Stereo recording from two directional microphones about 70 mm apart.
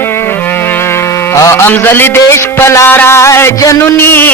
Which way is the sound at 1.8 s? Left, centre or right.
Left.